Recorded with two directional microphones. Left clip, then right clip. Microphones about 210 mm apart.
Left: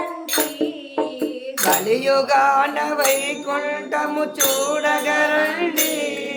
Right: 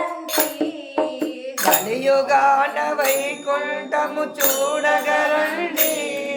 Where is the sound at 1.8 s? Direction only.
25° left (ahead or behind).